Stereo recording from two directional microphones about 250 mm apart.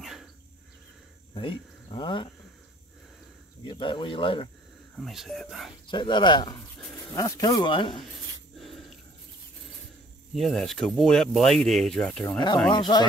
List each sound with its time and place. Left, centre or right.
0.0 s cricket: centre
1.3 s speech: centre
3.6 s speech: centre
4.9 s speech: centre
5.9 s speech: centre
8.5 s dog: centre
10.3 s speech: centre
12.7 s speech: centre